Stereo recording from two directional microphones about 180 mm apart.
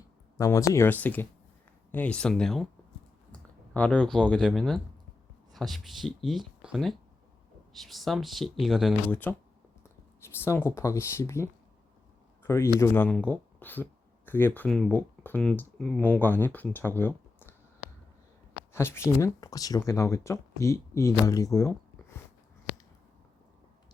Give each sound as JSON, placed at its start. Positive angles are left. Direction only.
{"t": 0.3, "sound": "speech", "side_deg": 20}
{"t": 9.0, "sound": "speech", "side_deg": 10}
{"t": 12.5, "sound": "speech", "side_deg": 15}
{"t": 18.7, "sound": "speech", "side_deg": 15}